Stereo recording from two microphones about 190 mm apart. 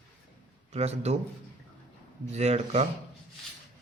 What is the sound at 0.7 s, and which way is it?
Speech, 35° right (ahead or behind).